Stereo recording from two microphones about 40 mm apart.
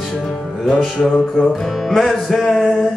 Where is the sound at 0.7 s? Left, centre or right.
Centre.